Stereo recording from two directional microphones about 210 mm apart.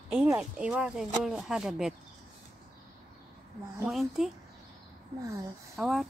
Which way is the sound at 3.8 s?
Centre (ahead or behind).